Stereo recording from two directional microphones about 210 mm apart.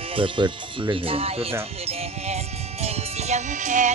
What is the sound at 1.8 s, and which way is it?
Music, 30° right (ahead or behind).